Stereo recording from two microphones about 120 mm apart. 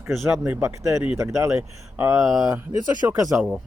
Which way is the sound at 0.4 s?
20° right (ahead or behind).